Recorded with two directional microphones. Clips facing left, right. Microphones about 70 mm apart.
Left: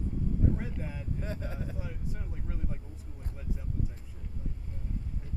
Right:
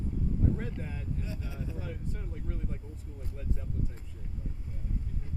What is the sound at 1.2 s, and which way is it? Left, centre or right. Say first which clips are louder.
Speech: left 2 dB; left.